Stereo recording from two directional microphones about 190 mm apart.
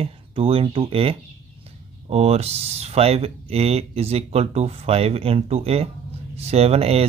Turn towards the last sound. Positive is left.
turn(degrees=-30)  # may be behind; listen again after turning